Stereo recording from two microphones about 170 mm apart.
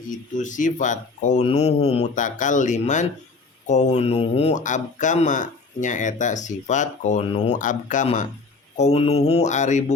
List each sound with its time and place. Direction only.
0.1 s speech: 50° left (ahead or behind)
8.8 s mantra: 40° left (ahead or behind)